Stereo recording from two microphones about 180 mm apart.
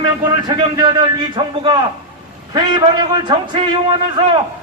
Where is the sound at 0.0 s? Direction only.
25° right (ahead or behind).